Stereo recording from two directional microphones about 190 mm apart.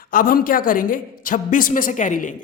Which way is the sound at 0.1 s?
50° left (ahead or behind).